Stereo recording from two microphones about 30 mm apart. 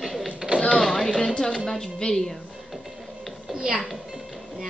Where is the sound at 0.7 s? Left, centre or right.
Centre.